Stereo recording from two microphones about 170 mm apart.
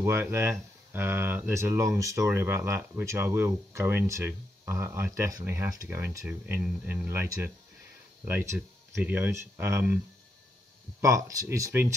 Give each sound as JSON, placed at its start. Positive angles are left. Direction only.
{"t": 0.0, "sound": "speech", "side_deg": -15}
{"t": 11.0, "sound": "speech", "side_deg": -20}